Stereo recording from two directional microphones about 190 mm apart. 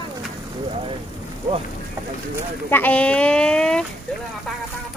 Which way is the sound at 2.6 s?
10° left (ahead or behind).